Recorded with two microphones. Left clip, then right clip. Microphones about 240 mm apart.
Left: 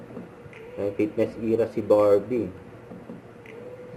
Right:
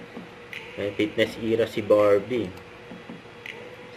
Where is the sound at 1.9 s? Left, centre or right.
Right.